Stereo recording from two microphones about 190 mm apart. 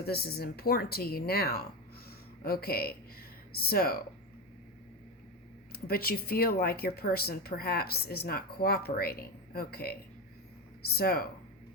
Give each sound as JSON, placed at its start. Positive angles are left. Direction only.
{"t": 0.0, "sound": "speech", "side_deg": 55}
{"t": 5.7, "sound": "speech", "side_deg": 55}
{"t": 10.9, "sound": "speech", "side_deg": 50}